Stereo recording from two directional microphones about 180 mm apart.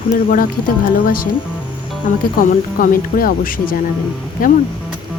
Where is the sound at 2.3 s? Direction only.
55° left (ahead or behind).